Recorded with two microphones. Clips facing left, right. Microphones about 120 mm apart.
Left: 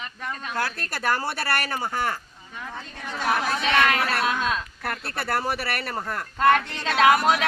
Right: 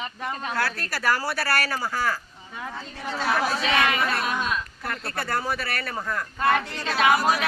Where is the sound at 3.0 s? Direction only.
10° right (ahead or behind).